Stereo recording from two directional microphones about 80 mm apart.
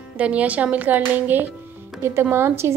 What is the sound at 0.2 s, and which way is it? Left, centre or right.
A woman's voice, centre.